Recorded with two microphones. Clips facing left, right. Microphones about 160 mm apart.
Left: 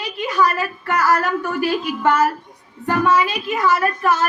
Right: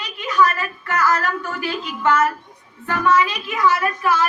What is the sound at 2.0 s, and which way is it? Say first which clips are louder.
Speech: even; 30° left (ahead or behind).